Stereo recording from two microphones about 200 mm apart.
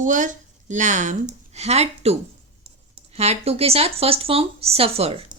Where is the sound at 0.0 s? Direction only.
40° right (ahead or behind).